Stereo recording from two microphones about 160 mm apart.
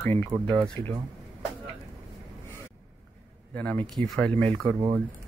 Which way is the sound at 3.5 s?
10° left (ahead or behind).